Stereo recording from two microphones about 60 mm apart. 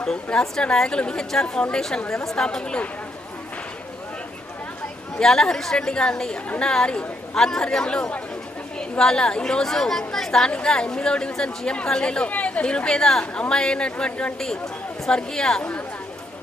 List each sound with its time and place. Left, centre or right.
0.0 s a woman's voice: centre
5.2 s a woman's voice: centre